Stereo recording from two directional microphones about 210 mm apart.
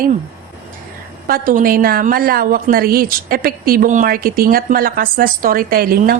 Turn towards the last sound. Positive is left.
turn(degrees=-45)  # may be behind; listen again after turning